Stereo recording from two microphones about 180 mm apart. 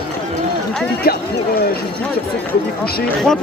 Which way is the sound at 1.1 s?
60° left (ahead or behind).